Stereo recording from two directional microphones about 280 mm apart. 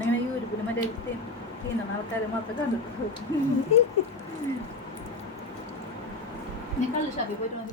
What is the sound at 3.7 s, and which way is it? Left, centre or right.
Speech, left.